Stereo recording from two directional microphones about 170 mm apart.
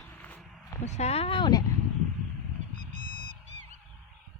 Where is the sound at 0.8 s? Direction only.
40° left (ahead or behind); by 1.6 s 25° left (ahead or behind).